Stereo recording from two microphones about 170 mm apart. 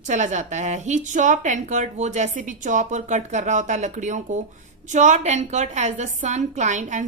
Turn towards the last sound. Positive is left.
turn(degrees=-45)  # may be behind; listen again after turning